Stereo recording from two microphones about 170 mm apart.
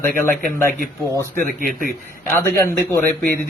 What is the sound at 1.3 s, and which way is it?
Speech, 55° right (ahead or behind).